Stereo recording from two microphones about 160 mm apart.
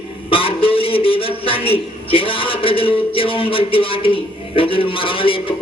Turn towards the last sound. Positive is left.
turn(degrees=35)  # may be behind; listen again after turning